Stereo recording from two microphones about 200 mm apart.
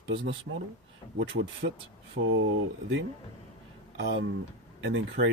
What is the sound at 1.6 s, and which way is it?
Speech, 50° right (ahead or behind).